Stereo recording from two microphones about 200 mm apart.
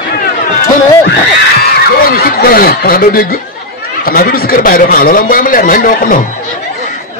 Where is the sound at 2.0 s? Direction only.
50° left (ahead or behind).